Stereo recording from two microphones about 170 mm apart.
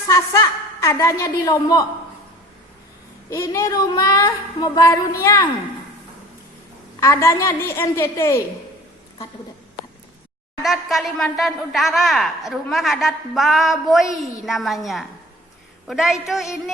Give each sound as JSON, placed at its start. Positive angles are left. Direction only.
{"t": 0.1, "sound": "a woman's voice", "side_deg": 20}
{"t": 3.2, "sound": "a woman's voice", "side_deg": 15}
{"t": 7.0, "sound": "a woman's voice", "side_deg": 15}
{"t": 10.6, "sound": "a woman's voice", "side_deg": 0}